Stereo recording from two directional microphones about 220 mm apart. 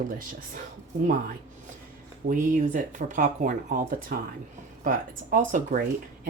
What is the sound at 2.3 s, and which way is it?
Speech, 35° right (ahead or behind).